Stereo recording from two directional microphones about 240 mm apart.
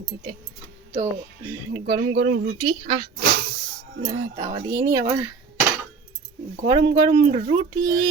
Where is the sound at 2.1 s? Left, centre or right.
Right.